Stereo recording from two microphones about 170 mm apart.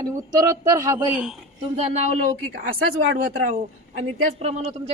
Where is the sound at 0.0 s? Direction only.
20° right (ahead or behind).